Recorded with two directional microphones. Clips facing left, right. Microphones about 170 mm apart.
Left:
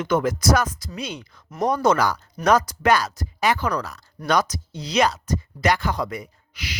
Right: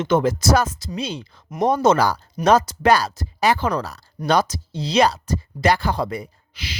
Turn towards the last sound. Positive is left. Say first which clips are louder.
# right 1 dB
turn(degrees=-30)  # may be behind; listen again after turning